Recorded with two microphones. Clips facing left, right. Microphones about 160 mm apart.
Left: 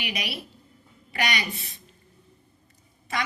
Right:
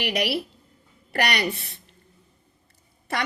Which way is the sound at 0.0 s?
70° right (ahead or behind).